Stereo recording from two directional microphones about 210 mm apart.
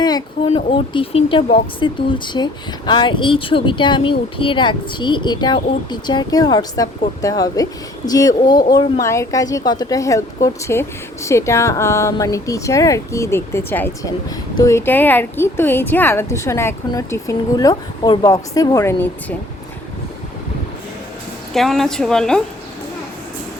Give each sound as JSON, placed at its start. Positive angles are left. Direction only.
{"t": 0.0, "sound": "a woman's voice", "side_deg": 25}
{"t": 21.5, "sound": "a woman's voice", "side_deg": 0}